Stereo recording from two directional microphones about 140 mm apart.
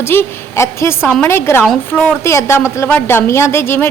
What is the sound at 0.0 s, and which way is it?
A woman's voice, 15° left (ahead or behind).